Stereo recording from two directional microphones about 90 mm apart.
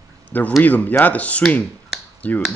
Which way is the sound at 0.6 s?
20° left (ahead or behind).